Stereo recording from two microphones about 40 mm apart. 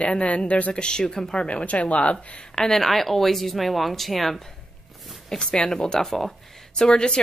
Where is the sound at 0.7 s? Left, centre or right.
Left.